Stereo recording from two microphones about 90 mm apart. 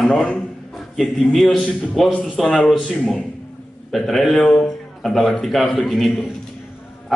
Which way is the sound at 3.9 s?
Centre (ahead or behind).